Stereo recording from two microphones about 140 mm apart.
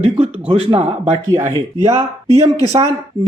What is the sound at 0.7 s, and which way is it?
Speech, 45° right (ahead or behind).